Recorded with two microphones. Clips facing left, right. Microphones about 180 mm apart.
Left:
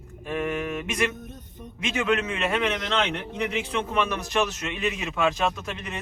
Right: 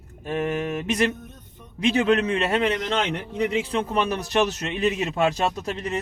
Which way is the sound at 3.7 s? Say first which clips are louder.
Right 2 dB; 35° right (ahead or behind).